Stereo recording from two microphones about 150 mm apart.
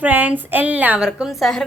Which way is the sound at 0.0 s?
10° right (ahead or behind).